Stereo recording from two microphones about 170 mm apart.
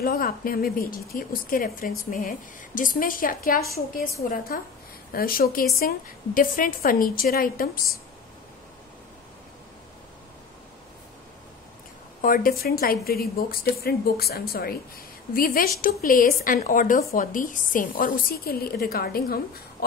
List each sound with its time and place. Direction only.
0.0 s a woman's voice: 60° left (ahead or behind)
12.2 s a woman's voice: 55° left (ahead or behind)